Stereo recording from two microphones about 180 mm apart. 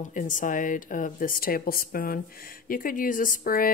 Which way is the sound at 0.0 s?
45° left (ahead or behind).